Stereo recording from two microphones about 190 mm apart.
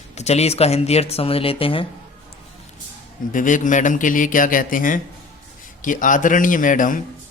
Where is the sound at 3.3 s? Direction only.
45° left (ahead or behind).